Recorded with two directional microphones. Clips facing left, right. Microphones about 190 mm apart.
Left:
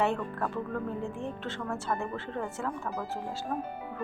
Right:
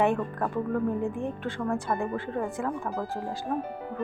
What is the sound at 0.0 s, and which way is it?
A woman's voice, 15° right (ahead or behind).